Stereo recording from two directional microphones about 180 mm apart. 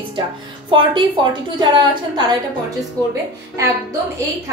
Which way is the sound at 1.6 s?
25° right (ahead or behind).